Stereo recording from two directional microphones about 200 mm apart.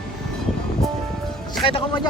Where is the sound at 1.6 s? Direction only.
25° left (ahead or behind).